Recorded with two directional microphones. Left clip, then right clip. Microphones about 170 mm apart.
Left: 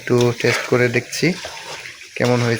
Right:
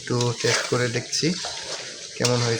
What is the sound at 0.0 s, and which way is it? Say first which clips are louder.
Speech: left 7 dB; 25° left (ahead or behind).